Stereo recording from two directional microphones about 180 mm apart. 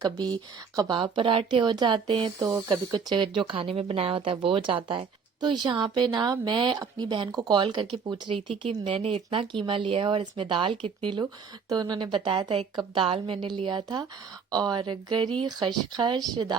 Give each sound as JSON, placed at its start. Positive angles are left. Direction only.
{"t": 0.0, "sound": "speech", "side_deg": -20}